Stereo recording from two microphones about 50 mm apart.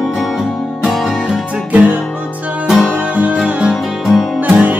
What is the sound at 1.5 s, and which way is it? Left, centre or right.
Music, right.